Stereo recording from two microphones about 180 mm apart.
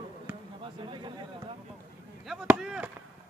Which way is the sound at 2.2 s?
5° right (ahead or behind).